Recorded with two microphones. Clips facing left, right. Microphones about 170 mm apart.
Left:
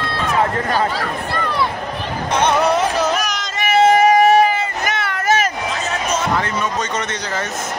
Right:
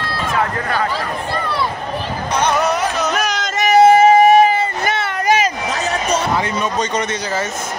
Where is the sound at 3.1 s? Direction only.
60° right (ahead or behind).